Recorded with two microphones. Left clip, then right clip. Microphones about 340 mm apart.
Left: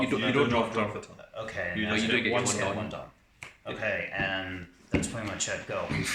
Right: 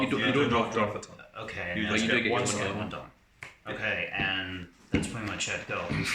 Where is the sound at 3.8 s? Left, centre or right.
Centre.